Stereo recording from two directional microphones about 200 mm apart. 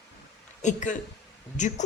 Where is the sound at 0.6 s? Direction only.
40° left (ahead or behind).